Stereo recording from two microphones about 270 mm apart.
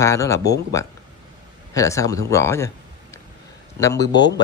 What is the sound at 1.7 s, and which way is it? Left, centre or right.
Speech, centre.